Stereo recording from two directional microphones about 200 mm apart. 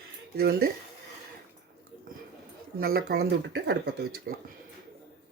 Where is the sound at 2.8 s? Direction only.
50° right (ahead or behind).